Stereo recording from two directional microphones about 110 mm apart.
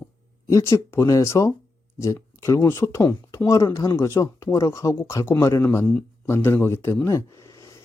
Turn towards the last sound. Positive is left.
turn(degrees=25)  # may be behind; listen again after turning